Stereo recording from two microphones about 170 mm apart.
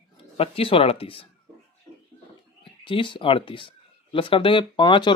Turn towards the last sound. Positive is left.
turn(degrees=25)  # may be behind; listen again after turning